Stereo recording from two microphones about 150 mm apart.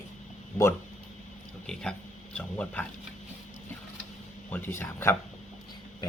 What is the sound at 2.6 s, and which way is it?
Speech, 5° left (ahead or behind).